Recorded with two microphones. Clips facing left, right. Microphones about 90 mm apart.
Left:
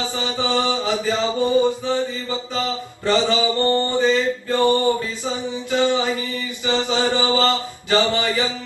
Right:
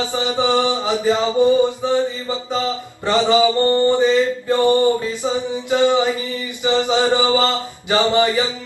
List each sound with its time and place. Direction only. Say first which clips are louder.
0.0 s mantra: right 4 dB; 20° right (ahead or behind)